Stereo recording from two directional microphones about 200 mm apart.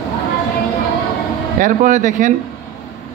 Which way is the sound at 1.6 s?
40° right (ahead or behind).